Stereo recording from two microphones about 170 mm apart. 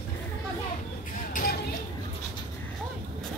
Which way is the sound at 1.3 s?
55° left (ahead or behind).